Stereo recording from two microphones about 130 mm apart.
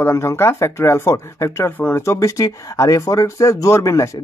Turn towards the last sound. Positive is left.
turn(degrees=25)  # may be behind; listen again after turning